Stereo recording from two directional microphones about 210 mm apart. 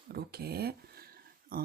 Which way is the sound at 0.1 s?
50° right (ahead or behind).